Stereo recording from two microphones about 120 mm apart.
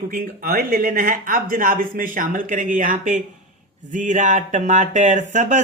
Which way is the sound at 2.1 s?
90° right.